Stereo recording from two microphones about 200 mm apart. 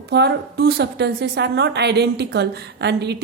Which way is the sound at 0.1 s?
55° right (ahead or behind).